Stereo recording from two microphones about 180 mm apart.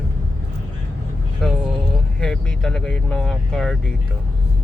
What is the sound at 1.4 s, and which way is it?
Vehicle, 5° left (ahead or behind).